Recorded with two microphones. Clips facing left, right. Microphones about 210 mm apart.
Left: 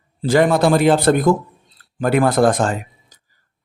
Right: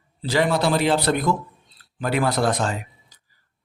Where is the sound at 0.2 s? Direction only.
50° left (ahead or behind).